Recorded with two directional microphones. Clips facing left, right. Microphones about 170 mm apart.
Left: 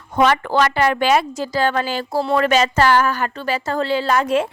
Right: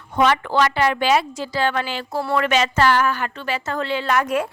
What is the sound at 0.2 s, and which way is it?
A woman's voice, 45° left (ahead or behind).